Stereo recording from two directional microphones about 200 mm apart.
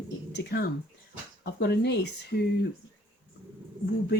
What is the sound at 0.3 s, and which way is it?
Speech, 50° left (ahead or behind).